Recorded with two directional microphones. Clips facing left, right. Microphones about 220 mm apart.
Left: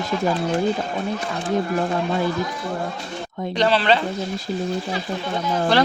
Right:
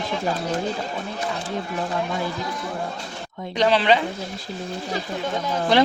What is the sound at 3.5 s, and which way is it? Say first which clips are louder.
Speech: even; 15° right (ahead or behind).